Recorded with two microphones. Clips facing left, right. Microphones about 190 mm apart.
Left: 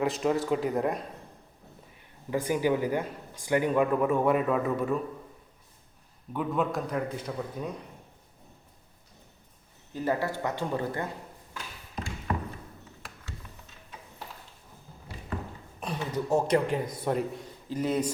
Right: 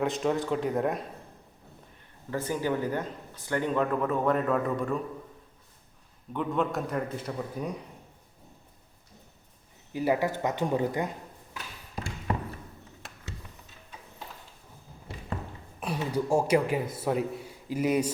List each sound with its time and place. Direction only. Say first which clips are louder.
0.0 s a man's voice: left 1 dB; centre (ahead or behind)
2.3 s speech: left 3 dB; 15° left (ahead or behind)
6.3 s a man's voice: even; 5° left (ahead or behind)
9.9 s speech: right 2 dB; 10° right (ahead or behind)
15.8 s a man's voice: right 2 dB; 10° right (ahead or behind)